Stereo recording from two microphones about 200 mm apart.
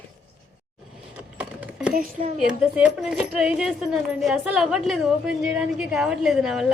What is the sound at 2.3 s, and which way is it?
Speech, 5° right (ahead or behind).